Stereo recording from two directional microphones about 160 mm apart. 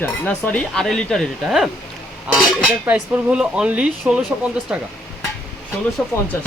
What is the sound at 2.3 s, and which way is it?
Cutlery, 5° right (ahead or behind).